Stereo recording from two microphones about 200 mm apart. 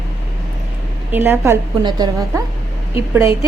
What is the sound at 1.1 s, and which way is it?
A woman's voice, 10° right (ahead or behind).